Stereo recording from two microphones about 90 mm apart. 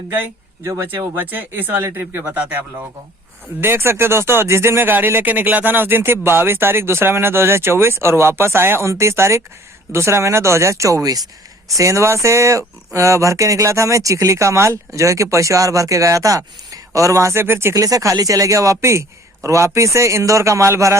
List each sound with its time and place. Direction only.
0.6 s speech: 35° right (ahead or behind)
0.9 s speech: 20° right (ahead or behind)
17.7 s speech: 40° right (ahead or behind)